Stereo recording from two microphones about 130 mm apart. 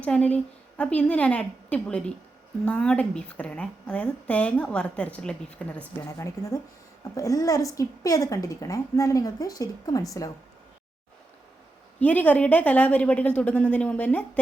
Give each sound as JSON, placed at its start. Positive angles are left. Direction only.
{"t": 0.0, "sound": "a woman's voice", "side_deg": 10}
{"t": 6.1, "sound": "a woman's voice", "side_deg": 25}
{"t": 11.9, "sound": "a woman's voice", "side_deg": 10}